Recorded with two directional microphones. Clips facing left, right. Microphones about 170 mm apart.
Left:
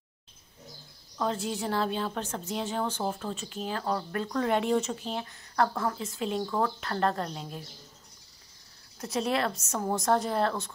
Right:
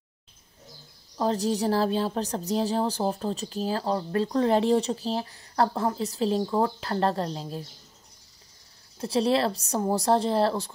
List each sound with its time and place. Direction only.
1.1 s speech: 35° right (ahead or behind)
9.0 s speech: 30° right (ahead or behind)